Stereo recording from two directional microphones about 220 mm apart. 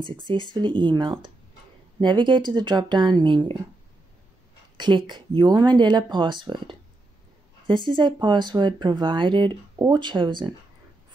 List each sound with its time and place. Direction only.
0.3 s speech: 20° right (ahead or behind)
4.7 s speech: 20° right (ahead or behind)